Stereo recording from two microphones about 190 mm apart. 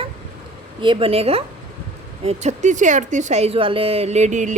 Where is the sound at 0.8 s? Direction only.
25° right (ahead or behind).